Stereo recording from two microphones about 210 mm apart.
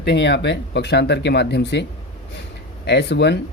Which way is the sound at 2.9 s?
55° left (ahead or behind).